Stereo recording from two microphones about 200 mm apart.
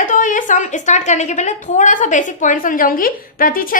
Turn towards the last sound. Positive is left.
turn(degrees=45)  # may be behind; listen again after turning